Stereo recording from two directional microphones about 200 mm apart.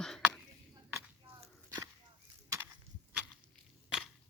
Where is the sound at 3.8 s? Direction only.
5° right (ahead or behind).